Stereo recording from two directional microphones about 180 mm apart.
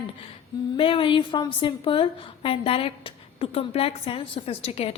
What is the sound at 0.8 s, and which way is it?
A woman's voice, 30° left (ahead or behind).